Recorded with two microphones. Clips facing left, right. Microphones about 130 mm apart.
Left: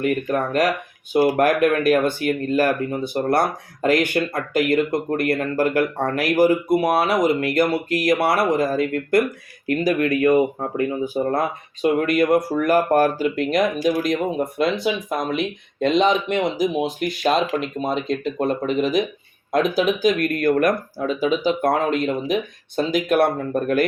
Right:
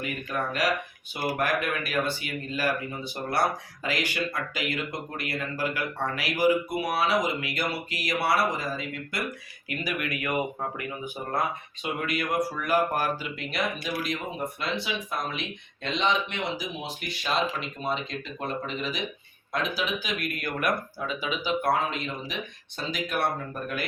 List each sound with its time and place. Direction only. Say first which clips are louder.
0.0 s speech: left 10 dB; 50° left (ahead or behind)
9.6 s speech: left 12 dB; 40° left (ahead or behind)